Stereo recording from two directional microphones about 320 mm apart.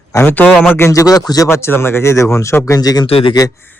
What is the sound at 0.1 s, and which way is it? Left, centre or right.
A man's voice, centre.